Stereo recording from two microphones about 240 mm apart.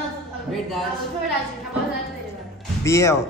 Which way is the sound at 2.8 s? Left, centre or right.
Centre.